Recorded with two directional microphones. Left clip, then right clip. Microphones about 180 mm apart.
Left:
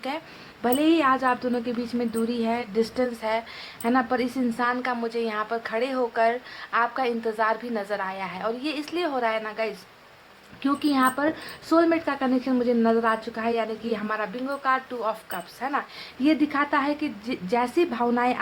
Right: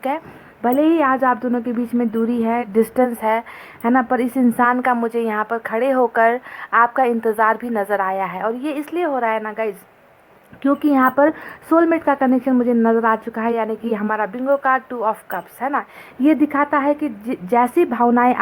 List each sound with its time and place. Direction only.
0.6 s a woman's voice: 30° right (ahead or behind)